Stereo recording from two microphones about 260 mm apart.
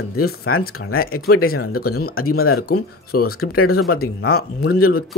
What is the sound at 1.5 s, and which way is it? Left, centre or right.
Speech, left.